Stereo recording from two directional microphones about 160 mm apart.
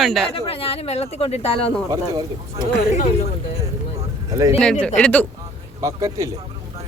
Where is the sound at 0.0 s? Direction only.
Centre (ahead or behind).